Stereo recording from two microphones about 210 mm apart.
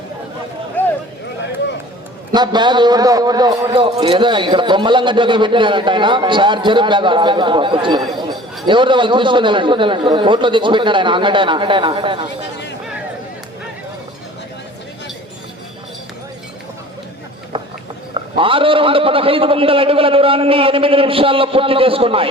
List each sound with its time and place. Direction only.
0.8 s a sound: 10° left (ahead or behind)
2.3 s a man's voice: 20° right (ahead or behind)
18.1 s a man's voice: 25° right (ahead or behind)